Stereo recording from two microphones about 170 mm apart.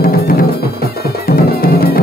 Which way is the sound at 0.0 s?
60° left (ahead or behind).